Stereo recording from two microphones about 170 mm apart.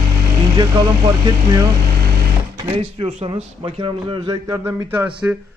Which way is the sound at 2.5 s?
30° right (ahead or behind).